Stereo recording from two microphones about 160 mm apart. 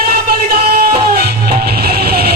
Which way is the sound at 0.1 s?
75° right (ahead or behind).